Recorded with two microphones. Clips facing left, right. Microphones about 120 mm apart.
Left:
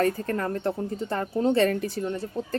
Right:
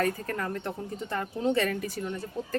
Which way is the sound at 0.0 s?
35° left (ahead or behind).